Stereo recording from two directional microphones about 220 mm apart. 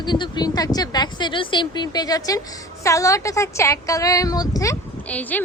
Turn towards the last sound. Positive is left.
turn(degrees=5)  # may be behind; listen again after turning